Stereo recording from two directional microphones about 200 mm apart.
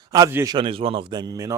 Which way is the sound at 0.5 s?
25° right (ahead or behind).